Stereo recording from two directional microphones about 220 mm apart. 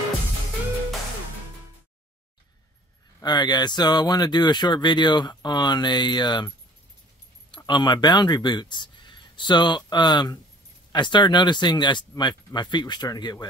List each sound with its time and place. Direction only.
3.2 s speech: 20° left (ahead or behind)
7.5 s speech: 20° left (ahead or behind)